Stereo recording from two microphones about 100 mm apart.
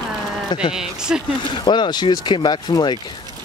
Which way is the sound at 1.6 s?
50° left (ahead or behind).